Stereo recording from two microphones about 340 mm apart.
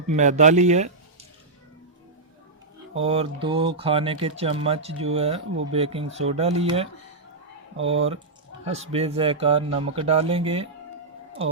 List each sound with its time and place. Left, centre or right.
0.1 s speech: right
2.9 s speech: centre